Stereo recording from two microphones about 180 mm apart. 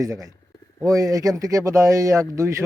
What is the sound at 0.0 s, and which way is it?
A man's voice, 20° right (ahead or behind).